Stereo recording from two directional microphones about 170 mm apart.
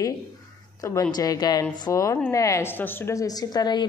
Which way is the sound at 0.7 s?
20° left (ahead or behind).